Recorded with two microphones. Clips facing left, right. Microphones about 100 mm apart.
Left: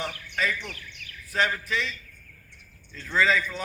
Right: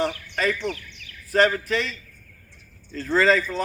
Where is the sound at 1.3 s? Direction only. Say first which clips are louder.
Right 7 dB; 40° right (ahead or behind).